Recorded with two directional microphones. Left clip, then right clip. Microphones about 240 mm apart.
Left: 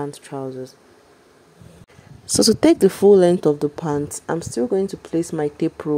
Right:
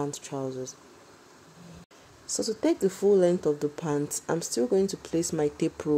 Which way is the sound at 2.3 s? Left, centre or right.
Left.